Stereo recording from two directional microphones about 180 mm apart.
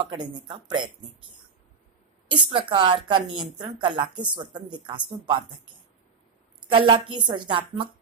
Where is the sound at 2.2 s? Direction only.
25° right (ahead or behind).